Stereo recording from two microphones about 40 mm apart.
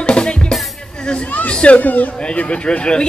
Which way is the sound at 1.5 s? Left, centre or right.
Left.